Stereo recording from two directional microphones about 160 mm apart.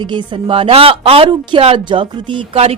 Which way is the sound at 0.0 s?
30° right (ahead or behind).